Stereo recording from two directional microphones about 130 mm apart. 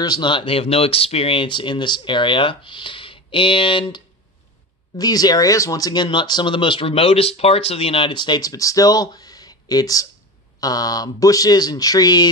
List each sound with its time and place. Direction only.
0.0 s speech: 35° left (ahead or behind)
4.9 s speech: 30° left (ahead or behind)